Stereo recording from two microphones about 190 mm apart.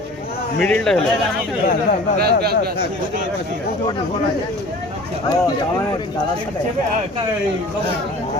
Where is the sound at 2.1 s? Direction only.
55° right (ahead or behind).